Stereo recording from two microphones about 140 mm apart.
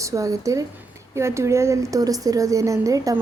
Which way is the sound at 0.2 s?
25° right (ahead or behind).